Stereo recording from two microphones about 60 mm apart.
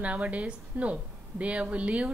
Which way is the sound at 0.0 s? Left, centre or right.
Right.